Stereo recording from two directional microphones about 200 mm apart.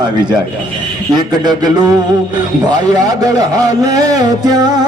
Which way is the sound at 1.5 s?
20° right (ahead or behind).